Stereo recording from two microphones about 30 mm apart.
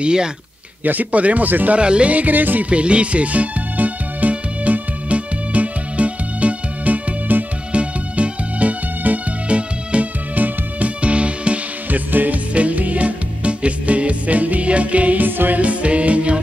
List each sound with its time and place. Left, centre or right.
0.0 s speech: right
1.1 s speech: right
1.8 s music: right
2.0 s music: right
2.7 s music: right
7.7 s music: right
9.5 s music: right
10.3 s music: right
11.0 s music: right
11.9 s music: right
12.5 s music: right
15.2 s music: right
15.6 s music: right